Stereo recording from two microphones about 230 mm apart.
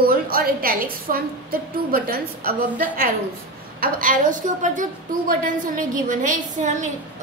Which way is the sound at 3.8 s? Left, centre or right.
Right.